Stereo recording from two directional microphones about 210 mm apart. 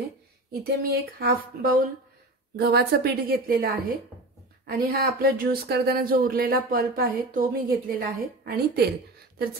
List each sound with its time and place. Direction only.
0.5 s speech: 45° right (ahead or behind)